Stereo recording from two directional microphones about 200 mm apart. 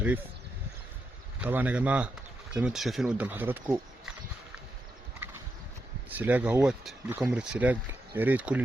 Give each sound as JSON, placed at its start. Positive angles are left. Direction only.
{"t": 1.4, "sound": "speech", "side_deg": -10}
{"t": 6.1, "sound": "speech", "side_deg": -10}